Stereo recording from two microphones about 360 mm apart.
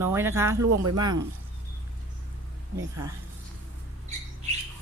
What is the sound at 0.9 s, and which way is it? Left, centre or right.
Speech, centre.